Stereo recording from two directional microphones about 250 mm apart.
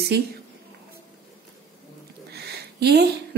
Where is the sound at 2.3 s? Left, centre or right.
Right.